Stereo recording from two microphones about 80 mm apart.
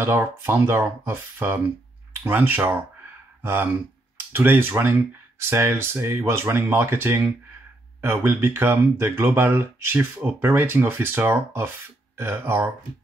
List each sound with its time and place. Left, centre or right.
0.0 s speech: right